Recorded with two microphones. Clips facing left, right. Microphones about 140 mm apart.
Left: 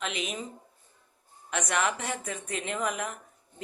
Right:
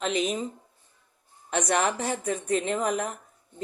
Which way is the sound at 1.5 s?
35° right (ahead or behind).